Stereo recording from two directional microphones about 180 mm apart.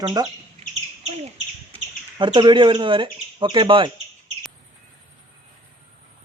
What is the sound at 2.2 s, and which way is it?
Speech, 25° right (ahead or behind).